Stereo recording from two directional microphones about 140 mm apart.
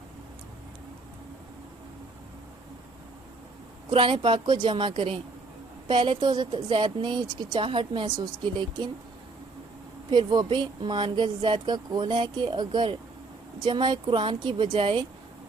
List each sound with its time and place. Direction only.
3.9 s speech: 35° right (ahead or behind)
10.1 s speech: 30° right (ahead or behind)